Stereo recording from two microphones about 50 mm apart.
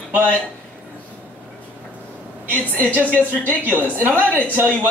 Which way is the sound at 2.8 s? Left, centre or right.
Left.